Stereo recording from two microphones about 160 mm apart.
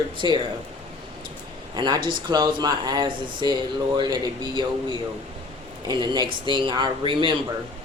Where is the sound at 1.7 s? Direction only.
30° right (ahead or behind).